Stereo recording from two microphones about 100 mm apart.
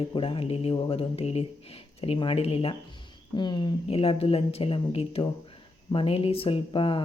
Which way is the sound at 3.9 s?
70° left (ahead or behind).